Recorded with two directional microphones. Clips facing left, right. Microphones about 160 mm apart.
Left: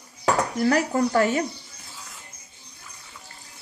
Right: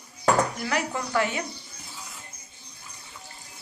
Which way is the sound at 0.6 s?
40° left (ahead or behind).